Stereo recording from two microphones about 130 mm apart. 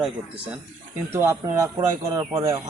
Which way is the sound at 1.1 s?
15° right (ahead or behind).